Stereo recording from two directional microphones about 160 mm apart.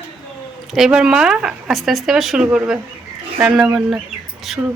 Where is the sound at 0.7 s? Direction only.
5° right (ahead or behind).